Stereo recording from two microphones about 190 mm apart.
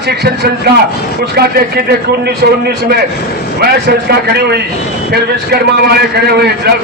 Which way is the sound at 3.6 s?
60° right (ahead or behind).